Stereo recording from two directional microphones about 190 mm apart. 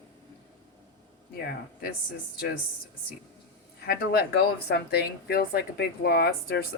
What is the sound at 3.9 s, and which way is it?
Speech, 55° left (ahead or behind).